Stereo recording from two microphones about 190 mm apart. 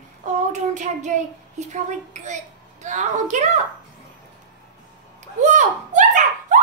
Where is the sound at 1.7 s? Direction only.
40° right (ahead or behind).